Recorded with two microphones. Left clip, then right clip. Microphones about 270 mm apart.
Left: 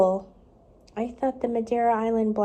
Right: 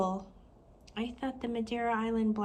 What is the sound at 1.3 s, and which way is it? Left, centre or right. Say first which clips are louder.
A woman's voice: left 9 dB; centre.